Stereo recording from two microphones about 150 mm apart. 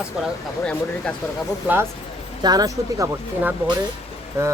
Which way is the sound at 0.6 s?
5° left (ahead or behind).